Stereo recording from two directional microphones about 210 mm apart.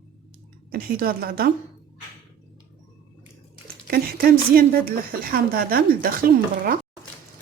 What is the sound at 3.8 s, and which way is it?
Speech, 45° right (ahead or behind).